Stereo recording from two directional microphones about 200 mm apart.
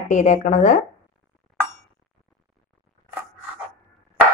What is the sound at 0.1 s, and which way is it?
Speech, 40° left (ahead or behind).